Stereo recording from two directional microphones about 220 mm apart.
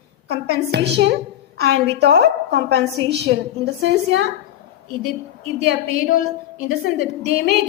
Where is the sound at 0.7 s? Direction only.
50° right (ahead or behind).